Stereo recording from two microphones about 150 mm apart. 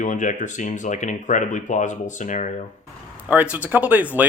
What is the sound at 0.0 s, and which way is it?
Speech, 55° left (ahead or behind).